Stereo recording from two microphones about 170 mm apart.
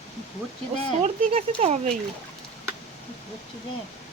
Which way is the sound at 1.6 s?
40° right (ahead or behind).